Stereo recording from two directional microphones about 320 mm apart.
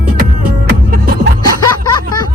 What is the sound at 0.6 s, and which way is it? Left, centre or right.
Music, right.